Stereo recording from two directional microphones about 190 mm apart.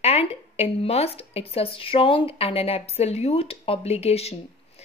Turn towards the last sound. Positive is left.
turn(degrees=35)  # may be behind; listen again after turning